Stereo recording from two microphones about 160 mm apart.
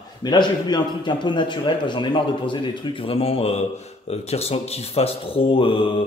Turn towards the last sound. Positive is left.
turn(degrees=35)  # may be behind; listen again after turning